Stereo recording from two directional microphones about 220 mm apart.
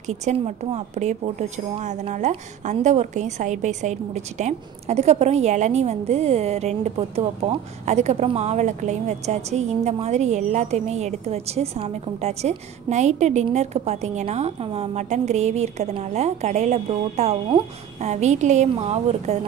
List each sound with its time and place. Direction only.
0.0 s a woman's voice: 30° right (ahead or behind)